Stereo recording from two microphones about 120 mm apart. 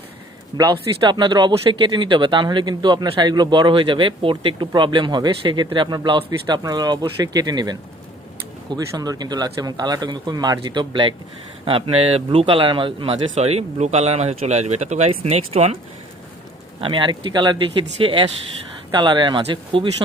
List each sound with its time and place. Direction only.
0.6 s a man's voice: 40° right (ahead or behind)
11.6 s speech: 55° right (ahead or behind)
13.3 s speech: 60° right (ahead or behind)
16.8 s a man's voice: 45° right (ahead or behind)